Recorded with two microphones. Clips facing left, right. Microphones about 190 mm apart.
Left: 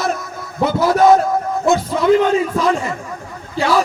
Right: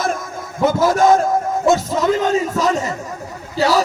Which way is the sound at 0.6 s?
45° right (ahead or behind).